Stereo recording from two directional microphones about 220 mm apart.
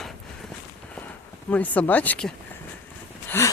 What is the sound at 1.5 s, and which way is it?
Speech, 5° left (ahead or behind).